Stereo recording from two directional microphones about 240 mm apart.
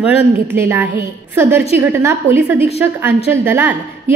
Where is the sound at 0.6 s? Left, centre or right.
Centre.